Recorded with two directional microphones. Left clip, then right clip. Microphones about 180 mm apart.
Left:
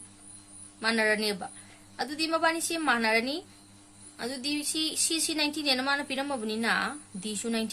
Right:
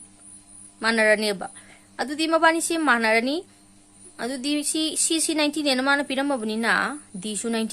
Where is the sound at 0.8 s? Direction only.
55° right (ahead or behind).